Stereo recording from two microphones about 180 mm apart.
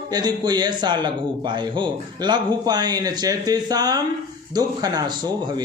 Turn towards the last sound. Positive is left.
turn(degrees=-20)  # may be behind; listen again after turning